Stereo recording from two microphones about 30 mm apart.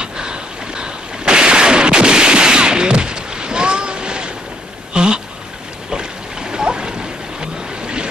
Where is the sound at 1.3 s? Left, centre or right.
Right.